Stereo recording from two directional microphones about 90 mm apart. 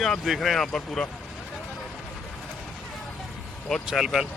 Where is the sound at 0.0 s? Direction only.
Centre (ahead or behind).